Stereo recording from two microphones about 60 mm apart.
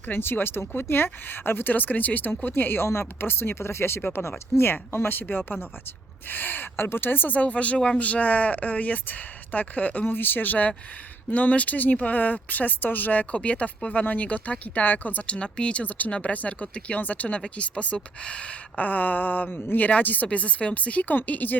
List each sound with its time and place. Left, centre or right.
0.1 s speech: left; by 18.9 s centre
18.9 s speech: left